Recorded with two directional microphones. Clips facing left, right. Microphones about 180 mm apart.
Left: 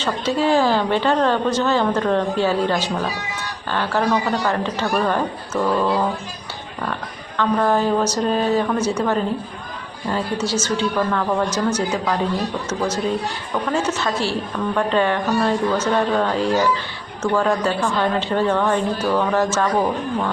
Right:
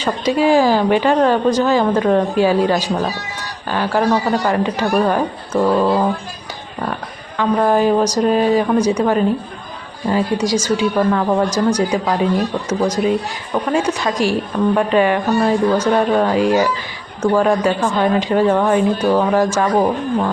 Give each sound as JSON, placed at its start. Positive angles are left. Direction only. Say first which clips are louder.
{"t": 0.0, "sound": "a woman's voice", "louder": "right 4 dB", "side_deg": -10}
{"t": 5.5, "sound": "speech", "louder": "right 5 dB", "side_deg": -25}
{"t": 7.3, "sound": "a woman's voice", "louder": "right 3 dB", "side_deg": -10}